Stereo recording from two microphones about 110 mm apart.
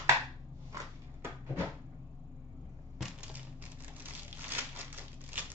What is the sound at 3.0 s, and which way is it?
Crushing, 10° right (ahead or behind).